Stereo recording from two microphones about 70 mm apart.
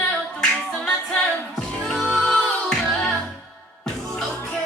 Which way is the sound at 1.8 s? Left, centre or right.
Centre.